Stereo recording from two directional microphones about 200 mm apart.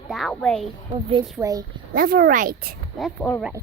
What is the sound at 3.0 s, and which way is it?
Speech, centre (ahead or behind).